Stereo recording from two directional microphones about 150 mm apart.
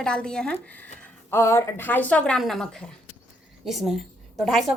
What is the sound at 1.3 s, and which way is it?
A woman's voice, 20° left (ahead or behind).